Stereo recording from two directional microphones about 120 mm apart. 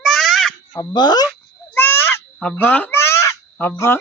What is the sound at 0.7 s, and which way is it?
Speech, 35° left (ahead or behind).